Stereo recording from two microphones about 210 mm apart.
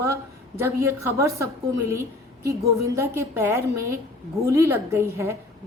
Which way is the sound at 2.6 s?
15° right (ahead or behind).